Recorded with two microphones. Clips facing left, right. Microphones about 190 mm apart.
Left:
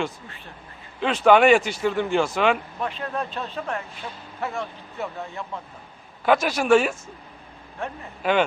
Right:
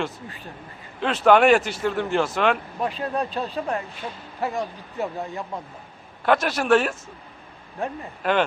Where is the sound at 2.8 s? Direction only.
35° right (ahead or behind).